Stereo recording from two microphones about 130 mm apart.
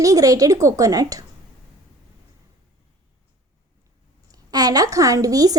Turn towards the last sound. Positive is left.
turn(degrees=-30)  # may be behind; listen again after turning